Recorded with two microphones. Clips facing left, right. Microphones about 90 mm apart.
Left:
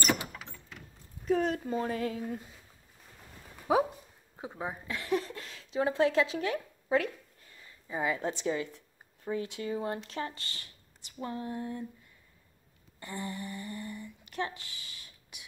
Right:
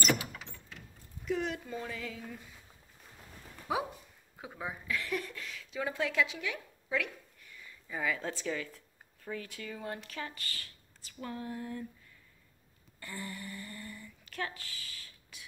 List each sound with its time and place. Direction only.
1.2 s speech: 40° left (ahead or behind)
4.4 s speech: 30° left (ahead or behind)
7.9 s speech: 25° left (ahead or behind)
13.0 s speech: 20° left (ahead or behind)